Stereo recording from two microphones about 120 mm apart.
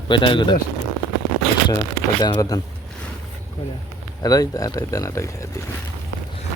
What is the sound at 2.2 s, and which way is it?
Speech, 35° left (ahead or behind).